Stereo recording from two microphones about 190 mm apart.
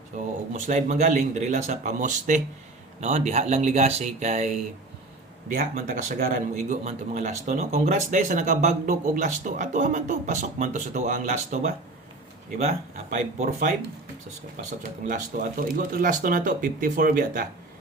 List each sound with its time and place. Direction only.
0.5 s speech: 40° right (ahead or behind)
5.5 s speech: 45° right (ahead or behind)
15.0 s speech: 45° right (ahead or behind)